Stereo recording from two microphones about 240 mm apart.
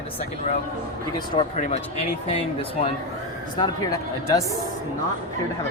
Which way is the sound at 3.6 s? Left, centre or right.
Centre.